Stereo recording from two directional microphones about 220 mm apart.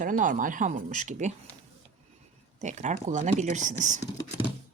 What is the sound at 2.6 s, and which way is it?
A woman's voice, 30° right (ahead or behind).